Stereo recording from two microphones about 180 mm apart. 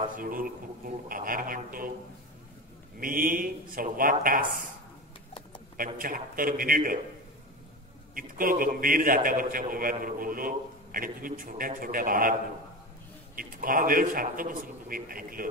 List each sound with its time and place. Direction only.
0.1 s a man's voice: 50° right (ahead or behind)
3.0 s a man's voice: 50° right (ahead or behind)
5.8 s a man's voice: 50° right (ahead or behind)
8.1 s a man's voice: 50° right (ahead or behind)
13.4 s a man's voice: 50° right (ahead or behind)